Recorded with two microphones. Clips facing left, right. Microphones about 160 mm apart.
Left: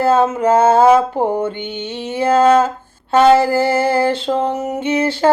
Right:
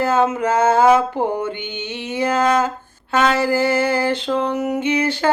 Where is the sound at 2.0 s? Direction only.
30° left (ahead or behind).